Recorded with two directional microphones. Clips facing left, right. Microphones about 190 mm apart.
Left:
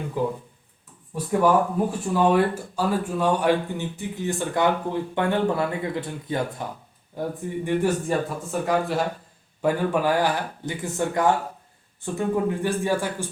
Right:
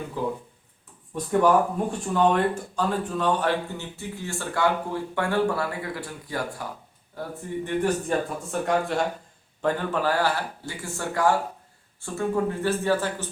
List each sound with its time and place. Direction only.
0.2 s speech: 15° left (ahead or behind)
7.2 s speech: 10° left (ahead or behind)